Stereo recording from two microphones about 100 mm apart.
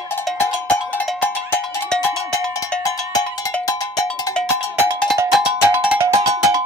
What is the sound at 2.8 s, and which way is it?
Cowbell, 40° left (ahead or behind).